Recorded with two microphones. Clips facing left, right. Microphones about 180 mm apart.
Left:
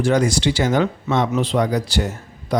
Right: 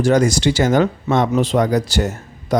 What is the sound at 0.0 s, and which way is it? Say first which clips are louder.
Speech: right 3 dB; 40° right (ahead or behind).